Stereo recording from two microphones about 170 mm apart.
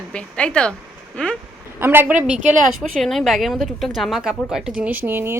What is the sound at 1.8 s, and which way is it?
Speech, 10° right (ahead or behind).